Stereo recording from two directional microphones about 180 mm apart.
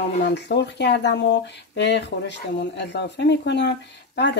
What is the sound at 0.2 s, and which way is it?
Speech, 75° left (ahead or behind).